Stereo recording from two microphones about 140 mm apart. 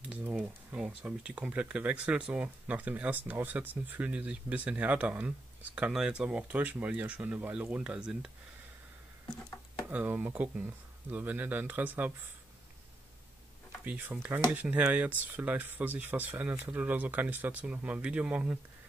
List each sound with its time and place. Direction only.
0.0 s speech: 10° right (ahead or behind)
9.8 s speech: 10° right (ahead or behind)
13.8 s speech: 10° right (ahead or behind)